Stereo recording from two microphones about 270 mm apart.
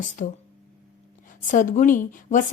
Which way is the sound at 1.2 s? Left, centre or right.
Left.